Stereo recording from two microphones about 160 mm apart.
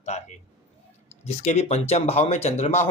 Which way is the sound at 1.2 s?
45° left (ahead or behind).